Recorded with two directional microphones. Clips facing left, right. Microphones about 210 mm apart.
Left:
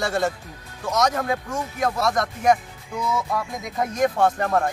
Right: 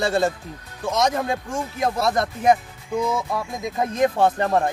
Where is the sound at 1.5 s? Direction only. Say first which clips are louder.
Right 1 dB; 15° right (ahead or behind).